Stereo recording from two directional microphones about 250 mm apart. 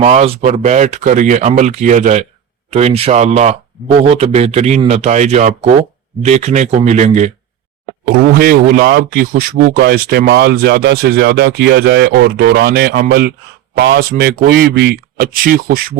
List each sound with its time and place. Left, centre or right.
0.0 s speech: right